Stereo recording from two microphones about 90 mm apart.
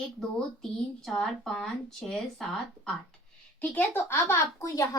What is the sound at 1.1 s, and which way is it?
Speech, 5° left (ahead or behind).